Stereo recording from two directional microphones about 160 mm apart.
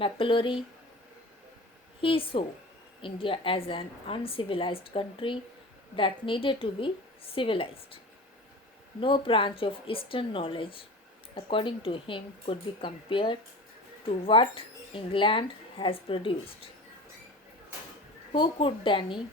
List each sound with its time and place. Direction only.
0.0 s a woman's voice: 35° left (ahead or behind)
2.0 s a woman's voice: 35° left (ahead or behind)
18.3 s a woman's voice: 35° left (ahead or behind)